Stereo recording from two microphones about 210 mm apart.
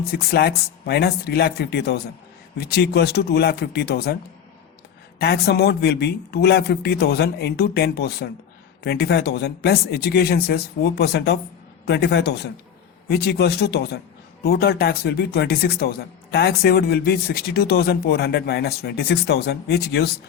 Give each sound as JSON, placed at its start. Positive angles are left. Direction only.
{"t": 0.0, "sound": "a man's voice", "side_deg": 45}
{"t": 5.2, "sound": "a man's voice", "side_deg": 50}